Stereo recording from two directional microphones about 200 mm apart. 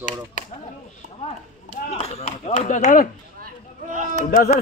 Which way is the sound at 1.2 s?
35° left (ahead or behind).